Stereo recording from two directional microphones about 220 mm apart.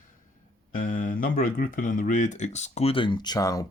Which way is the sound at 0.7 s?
40° left (ahead or behind).